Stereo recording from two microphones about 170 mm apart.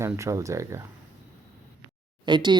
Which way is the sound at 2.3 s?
25° right (ahead or behind).